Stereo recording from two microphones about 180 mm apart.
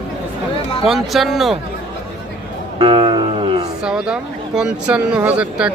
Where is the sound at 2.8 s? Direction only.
30° right (ahead or behind).